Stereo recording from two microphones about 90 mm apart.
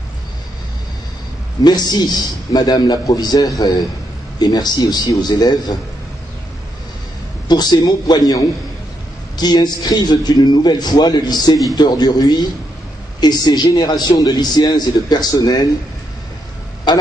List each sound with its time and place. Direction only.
1.6 s a man's voice: 50° left (ahead or behind)
7.4 s a man's voice: 50° left (ahead or behind)